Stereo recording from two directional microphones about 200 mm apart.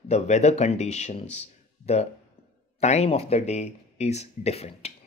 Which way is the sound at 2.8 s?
35° left (ahead or behind).